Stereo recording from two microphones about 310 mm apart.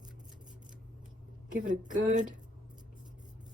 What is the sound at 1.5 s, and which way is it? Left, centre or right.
Speech, right.